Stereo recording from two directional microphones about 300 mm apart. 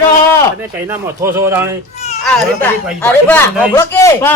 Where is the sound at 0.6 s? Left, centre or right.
Centre.